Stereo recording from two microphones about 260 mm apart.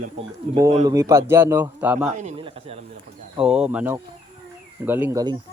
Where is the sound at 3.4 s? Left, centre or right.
Centre.